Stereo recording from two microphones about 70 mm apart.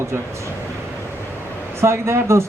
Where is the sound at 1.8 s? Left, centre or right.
Right.